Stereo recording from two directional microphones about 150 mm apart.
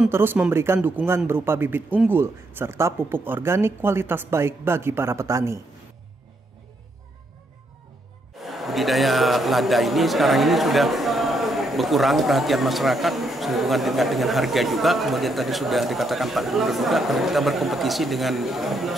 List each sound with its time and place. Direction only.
0.1 s a man's voice: 15° right (ahead or behind)
8.4 s speech: centre (ahead or behind)